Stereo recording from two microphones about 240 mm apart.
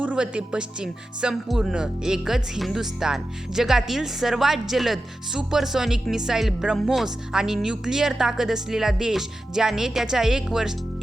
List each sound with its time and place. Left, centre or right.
0.0 s speech: centre